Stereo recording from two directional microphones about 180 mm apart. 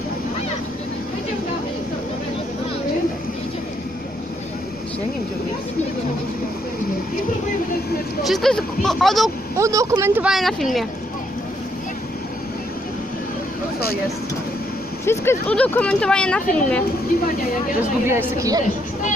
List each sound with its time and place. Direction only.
8.2 s speech: centre (ahead or behind)
9.6 s speech: 15° right (ahead or behind); by 10.8 s centre (ahead or behind)
15.0 s speech: 15° left (ahead or behind)
18.0 s speech: 15° right (ahead or behind)